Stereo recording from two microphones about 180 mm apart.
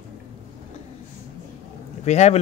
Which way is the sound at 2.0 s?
40° left (ahead or behind).